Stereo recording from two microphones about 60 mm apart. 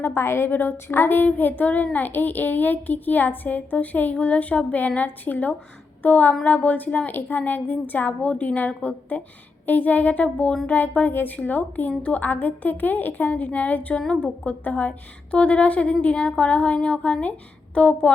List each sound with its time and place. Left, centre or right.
0.0 s a woman's voice: left
0.5 s child singing: left
6.0 s a woman's voice: left
6.4 s child singing: left